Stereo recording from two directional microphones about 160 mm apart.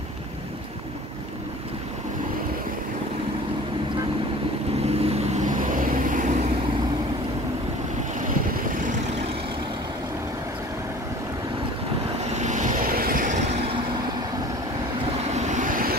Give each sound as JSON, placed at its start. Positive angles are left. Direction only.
{"t": 5.0, "sound": "vehicle", "side_deg": -40}
{"t": 12.4, "sound": "vehicle", "side_deg": -50}
{"t": 15.3, "sound": "vehicle", "side_deg": -50}